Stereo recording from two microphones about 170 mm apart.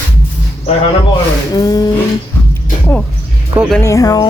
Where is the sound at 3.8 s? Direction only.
20° left (ahead or behind).